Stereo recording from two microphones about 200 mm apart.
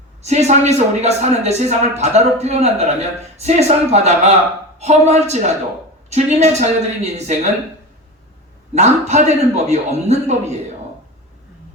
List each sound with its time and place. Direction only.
0.2 s speech: 35° right (ahead or behind)
8.7 s speech: 35° right (ahead or behind)